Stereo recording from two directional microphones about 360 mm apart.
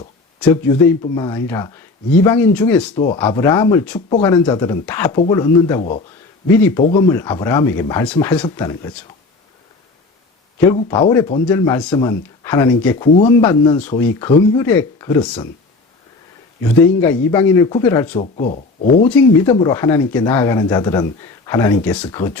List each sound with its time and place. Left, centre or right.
0.3 s speech: centre
3.0 s speech: centre
10.7 s speech: centre
17.3 s speech: centre
18.1 s speech: centre
19.0 s speech: centre